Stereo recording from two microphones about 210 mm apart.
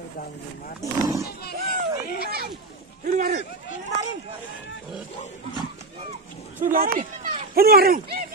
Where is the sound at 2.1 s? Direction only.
45° right (ahead or behind).